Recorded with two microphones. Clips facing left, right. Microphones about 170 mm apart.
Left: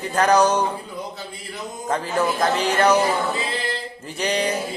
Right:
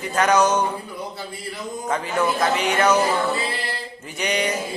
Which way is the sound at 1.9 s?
35° left (ahead or behind).